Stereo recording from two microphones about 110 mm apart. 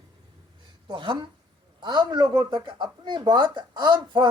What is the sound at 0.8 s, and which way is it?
Speech, 50° right (ahead or behind).